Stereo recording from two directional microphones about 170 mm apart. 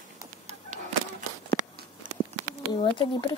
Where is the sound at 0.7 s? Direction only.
45° right (ahead or behind).